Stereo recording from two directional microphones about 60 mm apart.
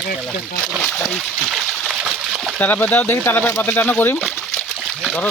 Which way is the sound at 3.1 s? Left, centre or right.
Left.